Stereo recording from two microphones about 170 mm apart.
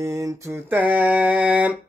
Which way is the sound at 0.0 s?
20° right (ahead or behind).